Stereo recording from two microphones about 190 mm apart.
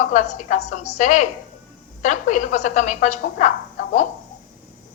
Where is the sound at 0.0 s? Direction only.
40° left (ahead or behind).